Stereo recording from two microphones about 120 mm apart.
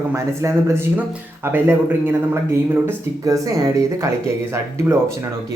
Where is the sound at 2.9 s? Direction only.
30° right (ahead or behind).